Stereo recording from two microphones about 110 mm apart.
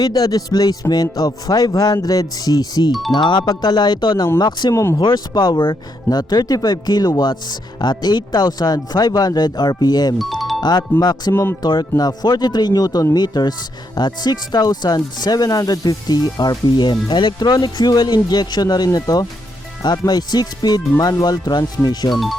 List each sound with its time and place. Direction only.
0.0 s speech: 35° left (ahead or behind)
4.7 s speech: 25° left (ahead or behind)
4.9 s speech: 40° left (ahead or behind)
10.2 s speech: centre (ahead or behind)
10.6 s speech: 40° left (ahead or behind)